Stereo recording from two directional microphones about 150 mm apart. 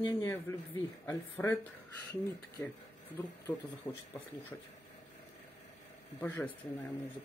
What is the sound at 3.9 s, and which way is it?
Speech, 30° left (ahead or behind).